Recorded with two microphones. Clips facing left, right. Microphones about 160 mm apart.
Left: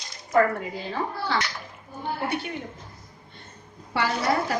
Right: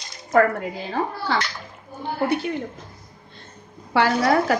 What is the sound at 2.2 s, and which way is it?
Speech, 90° right.